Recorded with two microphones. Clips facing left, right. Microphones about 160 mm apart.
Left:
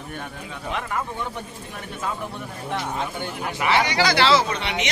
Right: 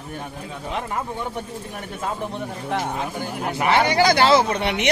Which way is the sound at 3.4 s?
45° right (ahead or behind).